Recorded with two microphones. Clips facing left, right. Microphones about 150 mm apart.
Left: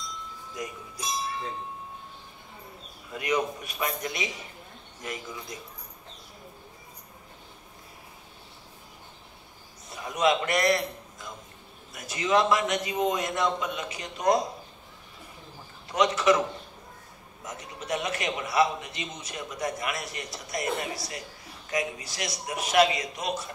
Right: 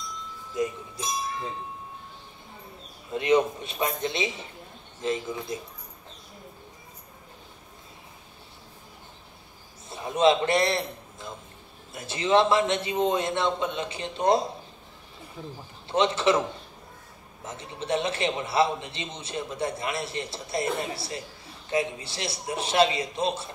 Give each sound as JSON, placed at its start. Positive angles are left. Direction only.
{"t": 0.6, "sound": "music", "side_deg": -25}
{"t": 3.1, "sound": "a man's voice", "side_deg": -25}
{"t": 9.8, "sound": "a man's voice", "side_deg": -25}
{"t": 15.9, "sound": "a man's voice", "side_deg": -30}